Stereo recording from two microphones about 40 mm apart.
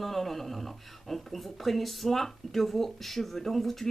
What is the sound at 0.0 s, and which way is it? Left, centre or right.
Speech, centre.